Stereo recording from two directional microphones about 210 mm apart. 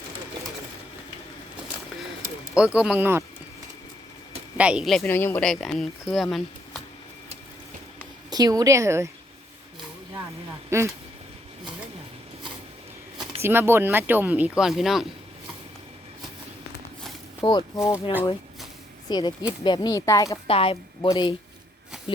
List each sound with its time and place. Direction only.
2.0 s a sound: 5° right (ahead or behind)
2.7 s speech: 5° right (ahead or behind)
4.5 s speech: 5° right (ahead or behind)
8.3 s speech: 15° right (ahead or behind)
10.7 s speech: 15° right (ahead or behind)
13.4 s speech: 10° right (ahead or behind)
17.4 s speech: 20° left (ahead or behind)
19.0 s a woman's voice: 20° left (ahead or behind)
21.9 s a sound: 5° right (ahead or behind)